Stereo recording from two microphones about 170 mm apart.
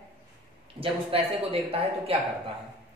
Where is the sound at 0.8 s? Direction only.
35° right (ahead or behind).